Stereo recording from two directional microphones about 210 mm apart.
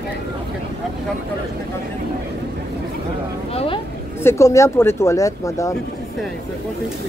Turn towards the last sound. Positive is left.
turn(degrees=15)  # may be behind; listen again after turning